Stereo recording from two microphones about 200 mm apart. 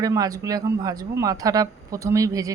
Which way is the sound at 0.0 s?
20° right (ahead or behind).